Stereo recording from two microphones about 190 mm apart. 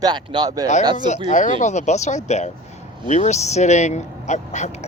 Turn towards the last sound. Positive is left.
turn(degrees=35)  # may be behind; listen again after turning